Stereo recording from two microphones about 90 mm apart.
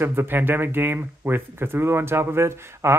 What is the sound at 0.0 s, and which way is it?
Speech, 25° right (ahead or behind).